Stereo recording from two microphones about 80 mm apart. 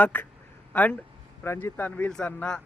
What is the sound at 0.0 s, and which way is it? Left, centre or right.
A man's voice, left.